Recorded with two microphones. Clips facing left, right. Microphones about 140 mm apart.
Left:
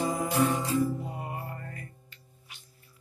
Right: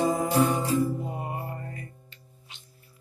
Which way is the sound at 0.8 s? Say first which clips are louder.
Right 1 dB; 25° right (ahead or behind).